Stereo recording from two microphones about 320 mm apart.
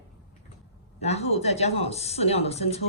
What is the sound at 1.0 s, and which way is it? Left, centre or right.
Speech, centre.